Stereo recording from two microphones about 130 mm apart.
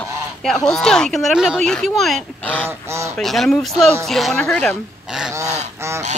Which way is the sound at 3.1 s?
Centre (ahead or behind).